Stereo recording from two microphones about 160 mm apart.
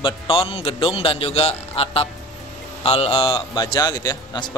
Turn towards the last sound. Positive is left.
turn(degrees=25)  # may be behind; listen again after turning